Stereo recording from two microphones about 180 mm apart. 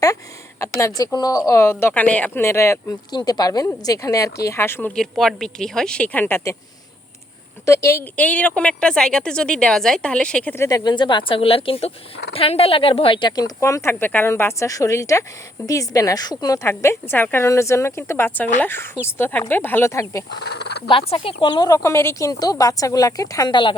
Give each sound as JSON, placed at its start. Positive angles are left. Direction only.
{"t": 0.8, "sound": "a woman's voice", "side_deg": 20}
{"t": 4.9, "sound": "speech", "side_deg": 0}
{"t": 7.6, "sound": "speech", "side_deg": 15}
{"t": 10.7, "sound": "a woman's voice", "side_deg": 20}
{"t": 20.4, "sound": "speech", "side_deg": 70}
{"t": 20.8, "sound": "speech", "side_deg": 30}